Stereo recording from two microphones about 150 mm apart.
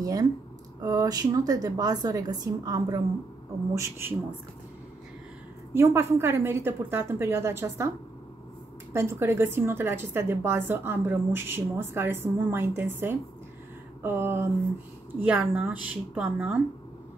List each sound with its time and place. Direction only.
0.0 s a woman's voice: 25° right (ahead or behind)
5.7 s a woman's voice: 15° right (ahead or behind)
8.9 s a woman's voice: 15° right (ahead or behind)